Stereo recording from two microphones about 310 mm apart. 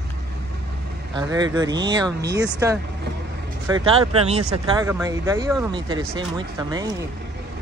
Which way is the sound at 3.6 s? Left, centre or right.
Centre.